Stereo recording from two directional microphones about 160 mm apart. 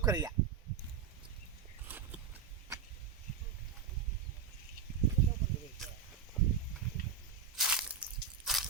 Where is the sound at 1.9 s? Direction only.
10° right (ahead or behind).